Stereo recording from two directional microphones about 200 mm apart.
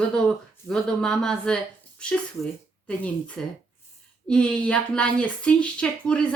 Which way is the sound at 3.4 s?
5° left (ahead or behind).